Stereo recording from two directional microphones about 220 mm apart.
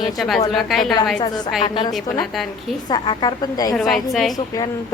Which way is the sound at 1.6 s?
20° left (ahead or behind).